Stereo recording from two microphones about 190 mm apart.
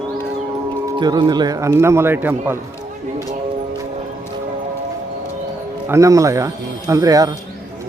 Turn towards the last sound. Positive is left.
turn(degrees=-20)  # may be behind; listen again after turning